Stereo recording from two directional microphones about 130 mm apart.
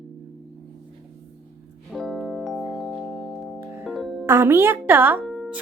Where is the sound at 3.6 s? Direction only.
10° right (ahead or behind).